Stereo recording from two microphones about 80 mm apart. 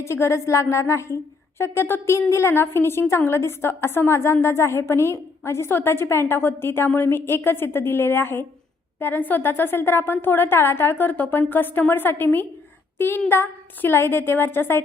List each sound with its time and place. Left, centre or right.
0.0 s a woman's voice: left